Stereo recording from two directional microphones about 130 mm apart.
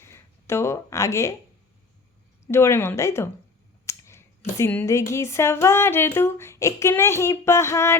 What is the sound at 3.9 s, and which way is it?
Scissors, 20° left (ahead or behind).